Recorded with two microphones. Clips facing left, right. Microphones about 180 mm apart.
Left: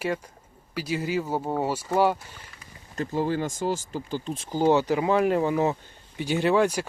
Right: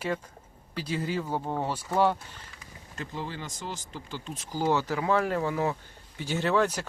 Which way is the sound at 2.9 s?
45° left (ahead or behind).